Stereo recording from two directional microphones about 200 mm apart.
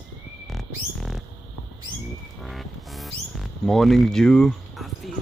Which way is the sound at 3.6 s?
Centre (ahead or behind).